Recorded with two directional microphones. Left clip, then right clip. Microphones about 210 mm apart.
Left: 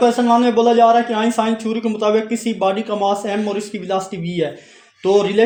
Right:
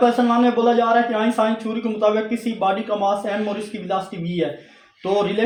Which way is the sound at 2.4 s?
50° left (ahead or behind).